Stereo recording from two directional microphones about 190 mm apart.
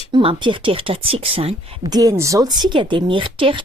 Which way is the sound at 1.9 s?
20° right (ahead or behind).